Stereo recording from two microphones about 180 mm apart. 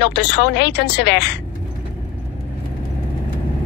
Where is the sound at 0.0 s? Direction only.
70° left (ahead or behind).